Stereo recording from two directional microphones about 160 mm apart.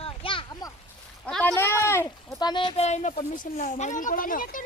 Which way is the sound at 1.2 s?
5° left (ahead or behind).